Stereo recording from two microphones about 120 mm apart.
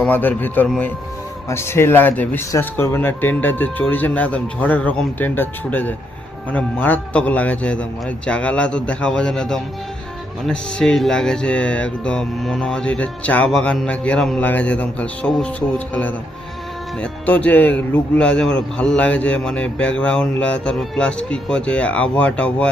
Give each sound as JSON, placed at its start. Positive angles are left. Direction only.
{"t": 0.1, "sound": "a man's voice", "side_deg": 15}
{"t": 17.0, "sound": "a man's voice", "side_deg": 15}